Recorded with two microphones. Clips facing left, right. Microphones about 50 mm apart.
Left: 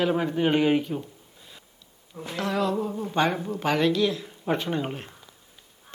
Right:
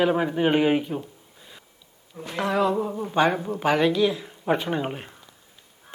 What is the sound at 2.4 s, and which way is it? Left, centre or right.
Speech, centre.